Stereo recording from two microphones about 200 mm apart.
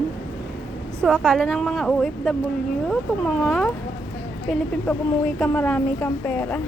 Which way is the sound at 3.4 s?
5° left (ahead or behind).